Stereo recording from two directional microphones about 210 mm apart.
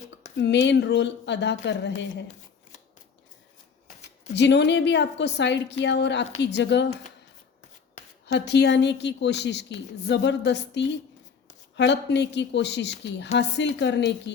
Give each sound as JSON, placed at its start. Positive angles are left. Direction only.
{"t": 0.3, "sound": "a woman's voice", "side_deg": 55}
{"t": 4.4, "sound": "a woman's voice", "side_deg": 55}
{"t": 8.3, "sound": "a woman's voice", "side_deg": 55}